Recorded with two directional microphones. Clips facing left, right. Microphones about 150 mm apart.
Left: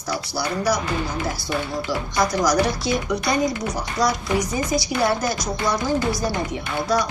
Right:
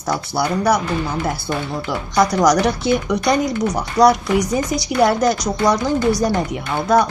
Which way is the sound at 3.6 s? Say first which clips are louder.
Right 8 dB; 65° right (ahead or behind).